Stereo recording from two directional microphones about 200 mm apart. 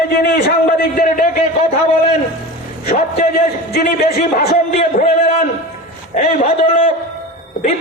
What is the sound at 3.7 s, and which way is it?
Speech, 45° left (ahead or behind).